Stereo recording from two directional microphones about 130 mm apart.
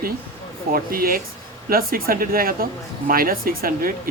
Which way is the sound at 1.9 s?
90° right.